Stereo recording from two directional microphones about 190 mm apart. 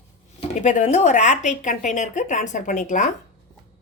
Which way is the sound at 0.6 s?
40° left (ahead or behind).